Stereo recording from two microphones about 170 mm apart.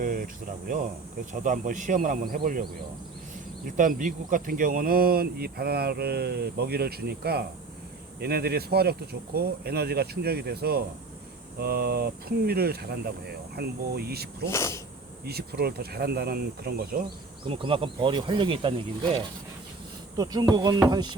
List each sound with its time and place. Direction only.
0.0 s a sound: 55° right (ahead or behind)
1.3 s speech: 50° right (ahead or behind)
3.7 s speech: 50° right (ahead or behind); by 14.3 s 70° right (ahead or behind)
14.4 s speech: 15° left (ahead or behind)
15.2 s speech: 65° right (ahead or behind)
17.5 s insect: 35° right (ahead or behind)
20.1 s insect: 20° right (ahead or behind)